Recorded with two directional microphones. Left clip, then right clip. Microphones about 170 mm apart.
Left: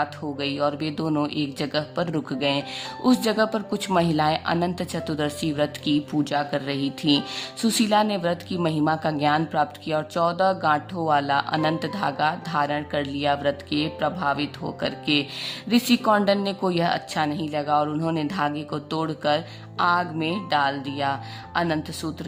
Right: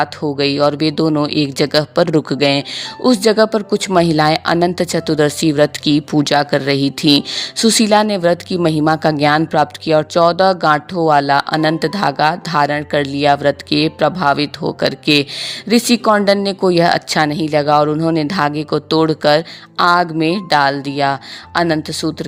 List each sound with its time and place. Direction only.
0.0 s speech: 50° right (ahead or behind)